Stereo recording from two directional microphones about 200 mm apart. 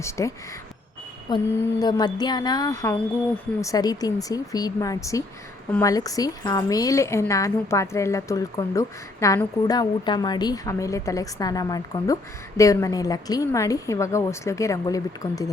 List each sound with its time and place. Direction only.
0.0 s a woman's voice: 15° left (ahead or behind)